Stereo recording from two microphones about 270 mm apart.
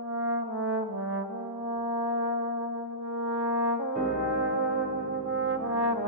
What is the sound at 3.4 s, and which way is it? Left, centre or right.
Brass instrument, right.